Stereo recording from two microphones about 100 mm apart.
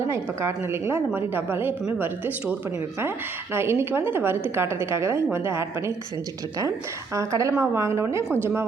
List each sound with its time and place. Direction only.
0.3 s a woman's voice: 25° right (ahead or behind)
7.1 s a woman's voice: 30° right (ahead or behind)